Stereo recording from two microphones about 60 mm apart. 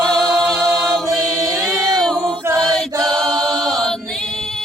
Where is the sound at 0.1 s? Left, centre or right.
Centre.